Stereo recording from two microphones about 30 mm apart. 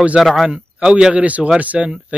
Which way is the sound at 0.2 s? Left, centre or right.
Right.